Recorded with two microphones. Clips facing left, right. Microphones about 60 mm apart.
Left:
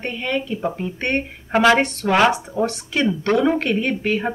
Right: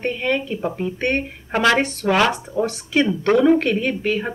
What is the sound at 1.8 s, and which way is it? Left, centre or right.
Speech, centre.